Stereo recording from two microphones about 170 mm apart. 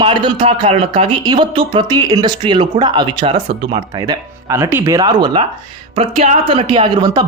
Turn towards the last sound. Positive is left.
turn(degrees=-25)  # may be behind; listen again after turning